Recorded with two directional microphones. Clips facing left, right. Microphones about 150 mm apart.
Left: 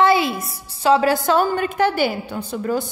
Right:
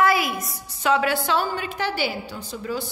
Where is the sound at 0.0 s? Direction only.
25° left (ahead or behind).